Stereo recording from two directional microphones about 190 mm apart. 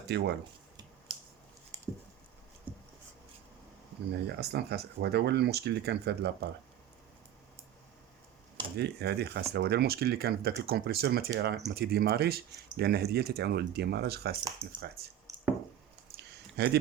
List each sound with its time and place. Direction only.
0.1 s speech: 60° right (ahead or behind)
2.7 s a sound: 10° right (ahead or behind)
4.1 s speech: 60° right (ahead or behind)
8.8 s speech: 60° right (ahead or behind)
14.4 s speech: 20° right (ahead or behind)
16.6 s speech: 60° right (ahead or behind)